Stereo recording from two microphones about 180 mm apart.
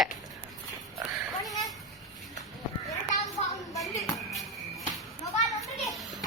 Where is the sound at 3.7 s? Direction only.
20° left (ahead or behind).